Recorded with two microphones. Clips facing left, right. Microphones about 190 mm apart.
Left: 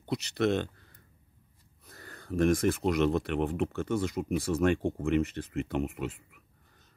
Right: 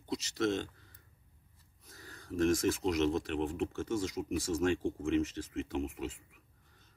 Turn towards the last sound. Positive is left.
turn(degrees=55)  # may be behind; listen again after turning